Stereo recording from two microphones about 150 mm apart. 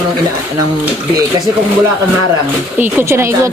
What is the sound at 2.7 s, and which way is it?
Speech, 15° right (ahead or behind).